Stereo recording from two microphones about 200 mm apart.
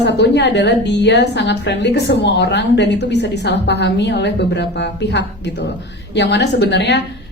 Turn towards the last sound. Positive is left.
turn(degrees=60)  # may be behind; listen again after turning